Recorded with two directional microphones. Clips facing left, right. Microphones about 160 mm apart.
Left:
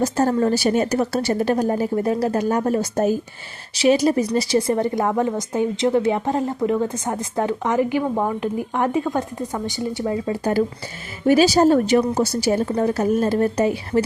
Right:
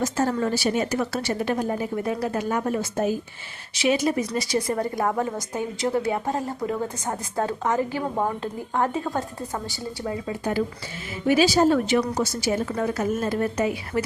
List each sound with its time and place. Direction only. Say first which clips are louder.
0.0 s a woman's voice: left 5 dB; 35° left (ahead or behind); by 9.8 s 20° left (ahead or behind)
10.0 s a woman's voice: left 5 dB; 35° left (ahead or behind)